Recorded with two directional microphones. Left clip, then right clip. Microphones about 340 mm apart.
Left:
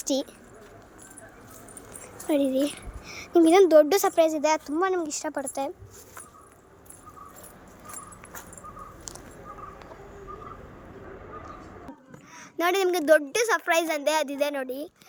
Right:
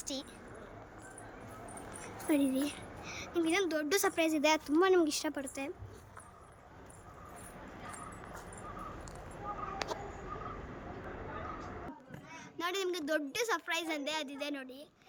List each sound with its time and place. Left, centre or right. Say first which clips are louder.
0.0 s speech: left 14 dB; centre
2.2 s a woman's voice: left 8 dB; centre
7.9 s dog: left 4 dB; left
12.4 s a woman's voice: left 12 dB; centre